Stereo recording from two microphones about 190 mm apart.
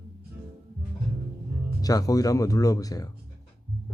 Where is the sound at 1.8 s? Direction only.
20° left (ahead or behind).